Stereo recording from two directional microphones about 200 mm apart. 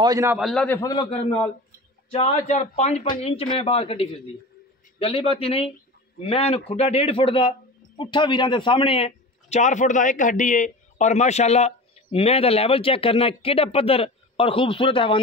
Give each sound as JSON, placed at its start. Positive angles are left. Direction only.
{"t": 0.0, "sound": "a man's voice", "side_deg": -15}
{"t": 0.4, "sound": "a man's voice", "side_deg": 5}
{"t": 2.0, "sound": "a man's voice", "side_deg": 30}